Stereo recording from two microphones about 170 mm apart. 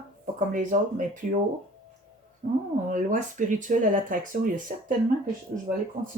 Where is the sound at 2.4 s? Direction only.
50° right (ahead or behind).